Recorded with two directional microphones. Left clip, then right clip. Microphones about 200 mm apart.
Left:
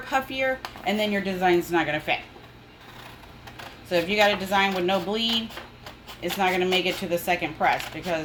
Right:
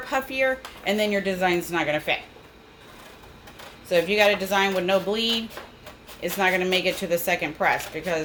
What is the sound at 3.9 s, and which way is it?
Speech, 30° right (ahead or behind).